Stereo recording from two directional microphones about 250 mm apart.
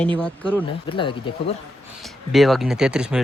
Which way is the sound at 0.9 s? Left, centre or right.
Centre.